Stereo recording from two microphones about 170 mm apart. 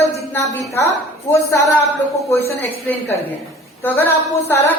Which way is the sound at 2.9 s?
10° left (ahead or behind).